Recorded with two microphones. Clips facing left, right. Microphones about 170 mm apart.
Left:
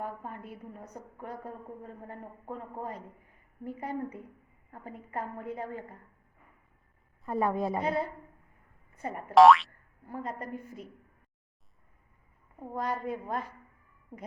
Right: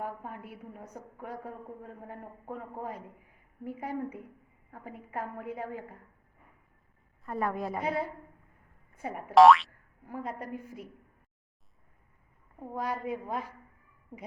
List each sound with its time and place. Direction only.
0.0 s a woman's voice: 10° right (ahead or behind)
7.3 s a woman's voice: 25° left (ahead or behind)
7.7 s a woman's voice: 5° right (ahead or behind)
9.0 s boing: 10° right (ahead or behind)
10.1 s a woman's voice: 10° right (ahead or behind)
12.5 s a woman's voice: centre (ahead or behind)
12.8 s a woman's voice: 10° right (ahead or behind)